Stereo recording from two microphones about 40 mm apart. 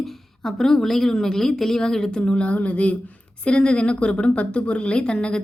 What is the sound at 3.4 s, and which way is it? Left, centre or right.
A woman's voice, left.